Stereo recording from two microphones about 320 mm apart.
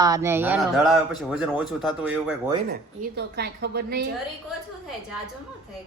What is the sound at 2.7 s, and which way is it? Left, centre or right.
A woman's voice, right.